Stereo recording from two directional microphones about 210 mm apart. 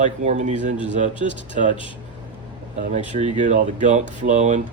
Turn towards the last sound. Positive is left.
turn(degrees=-35)  # may be behind; listen again after turning